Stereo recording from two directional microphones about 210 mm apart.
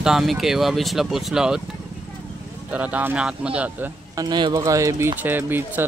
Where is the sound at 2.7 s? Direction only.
5° right (ahead or behind).